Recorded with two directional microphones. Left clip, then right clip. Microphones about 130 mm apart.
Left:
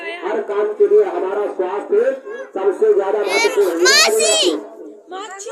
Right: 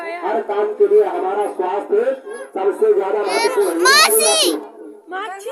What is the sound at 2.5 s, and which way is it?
Speech, 5° right (ahead or behind).